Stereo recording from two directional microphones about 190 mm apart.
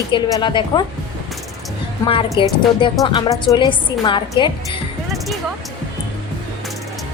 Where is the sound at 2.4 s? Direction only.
25° left (ahead or behind).